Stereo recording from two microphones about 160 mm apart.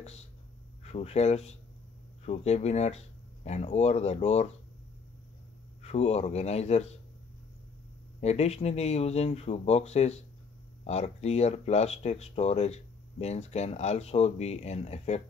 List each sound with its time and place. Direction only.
0.0 s speech: 40° left (ahead or behind)
5.8 s speech: 40° left (ahead or behind)
8.2 s speech: 40° left (ahead or behind)